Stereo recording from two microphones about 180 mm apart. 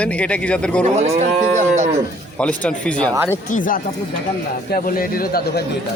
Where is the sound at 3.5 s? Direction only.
45° left (ahead or behind).